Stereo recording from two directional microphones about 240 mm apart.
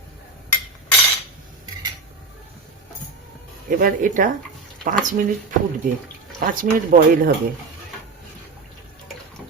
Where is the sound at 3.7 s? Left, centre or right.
Right.